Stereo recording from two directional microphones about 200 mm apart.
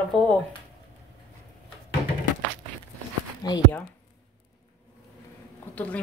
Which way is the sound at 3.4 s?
20° left (ahead or behind).